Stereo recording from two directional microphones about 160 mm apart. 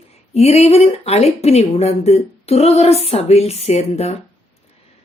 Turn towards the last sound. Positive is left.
turn(degrees=40)  # may be behind; listen again after turning